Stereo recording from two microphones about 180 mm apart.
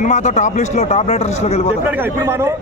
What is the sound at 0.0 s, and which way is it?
A man's voice, 40° left (ahead or behind).